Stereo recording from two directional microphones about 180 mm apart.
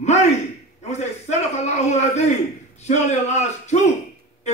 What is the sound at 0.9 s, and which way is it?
A man's voice, 40° left (ahead or behind).